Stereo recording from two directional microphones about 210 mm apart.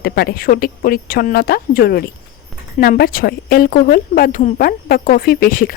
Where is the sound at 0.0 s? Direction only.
50° left (ahead or behind).